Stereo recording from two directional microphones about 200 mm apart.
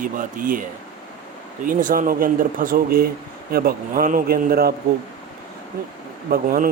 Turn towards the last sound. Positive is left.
turn(degrees=-45)  # may be behind; listen again after turning